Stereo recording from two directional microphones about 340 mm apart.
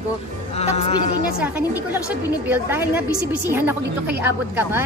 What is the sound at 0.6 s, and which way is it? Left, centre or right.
Speech, centre.